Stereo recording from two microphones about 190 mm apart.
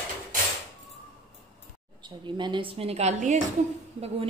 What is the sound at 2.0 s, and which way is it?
A woman's voice, 25° right (ahead or behind).